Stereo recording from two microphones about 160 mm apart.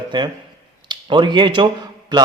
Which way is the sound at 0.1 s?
30° right (ahead or behind).